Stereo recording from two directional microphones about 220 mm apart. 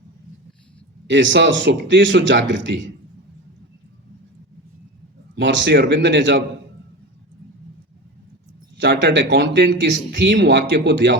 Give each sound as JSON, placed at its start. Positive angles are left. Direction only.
{"t": 1.0, "sound": "a man's voice", "side_deg": -55}
{"t": 5.3, "sound": "speech", "side_deg": -50}
{"t": 8.8, "sound": "speech", "side_deg": -45}